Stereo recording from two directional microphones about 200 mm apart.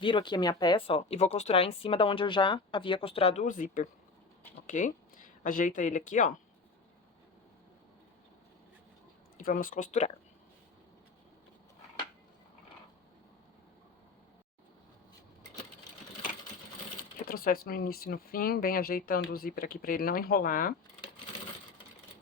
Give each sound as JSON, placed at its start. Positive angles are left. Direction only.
{"t": 0.0, "sound": "speech", "side_deg": 25}
{"t": 9.4, "sound": "speech", "side_deg": 45}
{"t": 17.0, "sound": "speech", "side_deg": 45}